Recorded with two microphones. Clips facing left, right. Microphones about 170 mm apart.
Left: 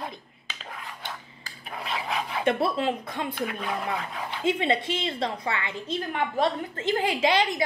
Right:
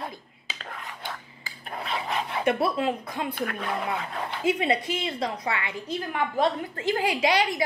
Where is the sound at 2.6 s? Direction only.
30° left (ahead or behind).